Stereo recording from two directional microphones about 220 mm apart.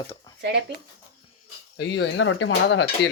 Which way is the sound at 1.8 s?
55° left (ahead or behind).